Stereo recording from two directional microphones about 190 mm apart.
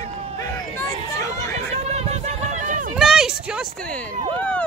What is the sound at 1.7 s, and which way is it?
Run, 35° right (ahead or behind).